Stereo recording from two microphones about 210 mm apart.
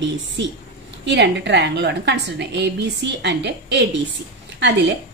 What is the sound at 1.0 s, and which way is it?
A woman's voice, 55° right (ahead or behind).